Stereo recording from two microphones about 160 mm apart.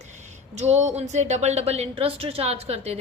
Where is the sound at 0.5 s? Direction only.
45° right (ahead or behind).